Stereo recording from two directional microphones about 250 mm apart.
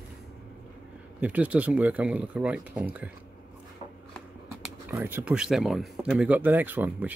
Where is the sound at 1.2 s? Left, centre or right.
Centre.